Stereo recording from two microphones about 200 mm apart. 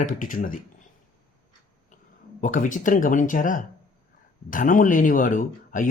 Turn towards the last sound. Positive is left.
turn(degrees=40)  # may be behind; listen again after turning